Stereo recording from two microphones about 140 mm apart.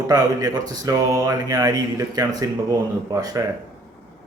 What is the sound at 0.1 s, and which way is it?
Speech, 25° right (ahead or behind).